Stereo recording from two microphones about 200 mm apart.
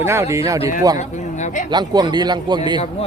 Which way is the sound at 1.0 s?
35° left (ahead or behind).